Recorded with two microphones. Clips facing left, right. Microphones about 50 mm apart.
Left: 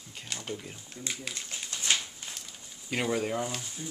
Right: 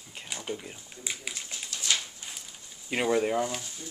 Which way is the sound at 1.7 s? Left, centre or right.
Left.